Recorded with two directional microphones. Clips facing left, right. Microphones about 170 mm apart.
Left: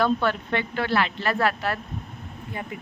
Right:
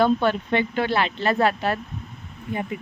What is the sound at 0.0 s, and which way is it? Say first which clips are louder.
Speech: right 3 dB; 20° right (ahead or behind).